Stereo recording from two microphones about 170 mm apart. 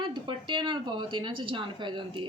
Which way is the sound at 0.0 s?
25° right (ahead or behind).